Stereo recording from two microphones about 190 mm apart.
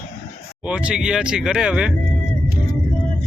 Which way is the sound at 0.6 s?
5° right (ahead or behind).